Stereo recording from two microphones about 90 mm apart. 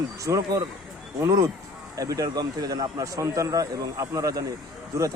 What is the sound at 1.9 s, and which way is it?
A man's voice, 40° right (ahead or behind).